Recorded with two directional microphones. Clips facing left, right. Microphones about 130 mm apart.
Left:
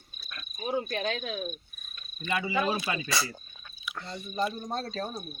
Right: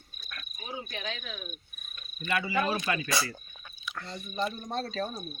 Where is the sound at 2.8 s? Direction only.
15° left (ahead or behind).